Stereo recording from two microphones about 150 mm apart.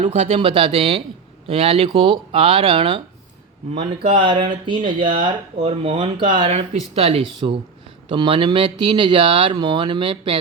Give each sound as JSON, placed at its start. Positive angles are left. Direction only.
{"t": 0.1, "sound": "speech", "side_deg": -45}
{"t": 0.3, "sound": "speech", "side_deg": -35}
{"t": 4.2, "sound": "speech", "side_deg": -30}
{"t": 6.4, "sound": "speech", "side_deg": -45}